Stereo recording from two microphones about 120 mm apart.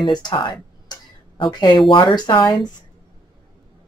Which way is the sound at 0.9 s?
35° left (ahead or behind).